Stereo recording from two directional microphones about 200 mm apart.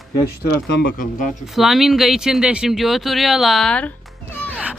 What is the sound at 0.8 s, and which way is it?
Speech, 50° left (ahead or behind).